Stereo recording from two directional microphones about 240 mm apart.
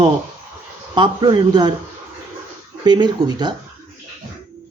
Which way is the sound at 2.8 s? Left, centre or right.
Centre.